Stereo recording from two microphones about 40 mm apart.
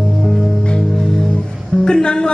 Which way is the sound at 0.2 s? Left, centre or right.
Centre.